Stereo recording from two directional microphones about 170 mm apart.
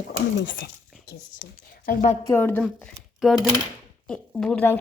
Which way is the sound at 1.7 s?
55° left (ahead or behind).